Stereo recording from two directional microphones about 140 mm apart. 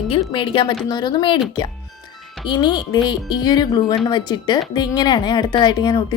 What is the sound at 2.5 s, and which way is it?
Speech, 30° left (ahead or behind).